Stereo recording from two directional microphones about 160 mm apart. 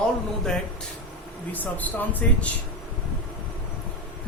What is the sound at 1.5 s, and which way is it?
Speech, 10° left (ahead or behind).